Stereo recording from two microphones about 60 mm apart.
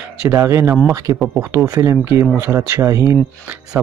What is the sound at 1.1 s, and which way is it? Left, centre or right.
Speech, right.